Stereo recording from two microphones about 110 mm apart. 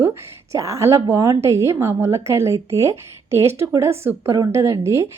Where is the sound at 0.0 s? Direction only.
25° right (ahead or behind).